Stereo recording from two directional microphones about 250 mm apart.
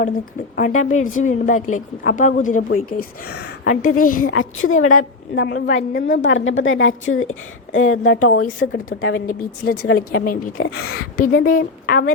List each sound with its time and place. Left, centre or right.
0.0 s a woman's voice: left
4.4 s a woman's voice: left
5.6 s a woman's voice: left
8.4 s a woman's voice: left
8.9 s a woman's voice: left
10.0 s a woman's voice: left
10.6 s speech: left
11.2 s a woman's voice: left